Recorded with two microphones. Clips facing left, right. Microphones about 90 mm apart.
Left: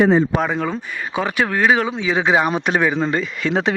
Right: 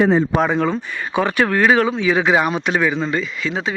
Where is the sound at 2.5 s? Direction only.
40° left (ahead or behind); by 3.7 s 55° left (ahead or behind).